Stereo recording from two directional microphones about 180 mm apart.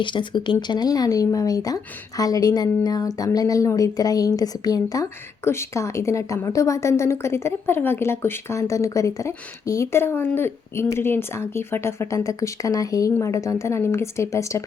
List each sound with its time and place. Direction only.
0.0 s a woman's voice: 25° left (ahead or behind)